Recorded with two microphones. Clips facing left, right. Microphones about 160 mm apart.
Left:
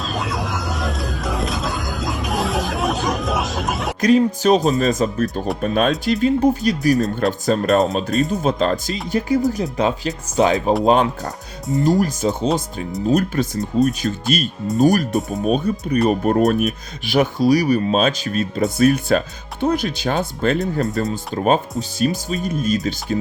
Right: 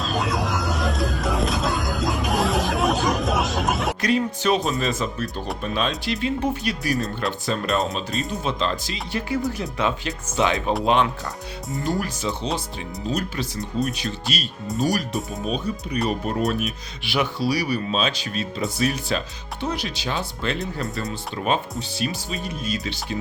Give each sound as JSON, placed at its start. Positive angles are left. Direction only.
{"t": 0.0, "sound": "vehicle", "side_deg": 0}
{"t": 4.0, "sound": "speech", "side_deg": 40}